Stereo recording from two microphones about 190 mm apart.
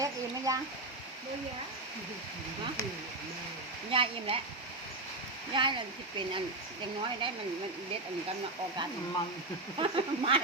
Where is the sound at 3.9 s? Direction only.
30° right (ahead or behind).